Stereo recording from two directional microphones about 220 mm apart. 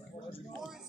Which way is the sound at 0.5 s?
Centre (ahead or behind).